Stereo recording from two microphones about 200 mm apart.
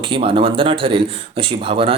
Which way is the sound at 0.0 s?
25° right (ahead or behind).